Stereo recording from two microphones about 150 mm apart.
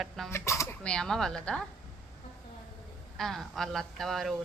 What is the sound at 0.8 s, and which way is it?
Speech, 5° left (ahead or behind).